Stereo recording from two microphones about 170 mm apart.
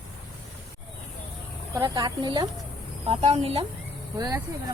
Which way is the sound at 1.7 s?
20° right (ahead or behind).